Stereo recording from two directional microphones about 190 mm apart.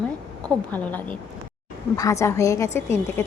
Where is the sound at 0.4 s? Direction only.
5° left (ahead or behind).